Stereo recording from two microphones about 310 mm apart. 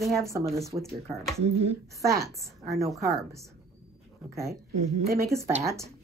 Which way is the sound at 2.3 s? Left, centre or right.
Centre.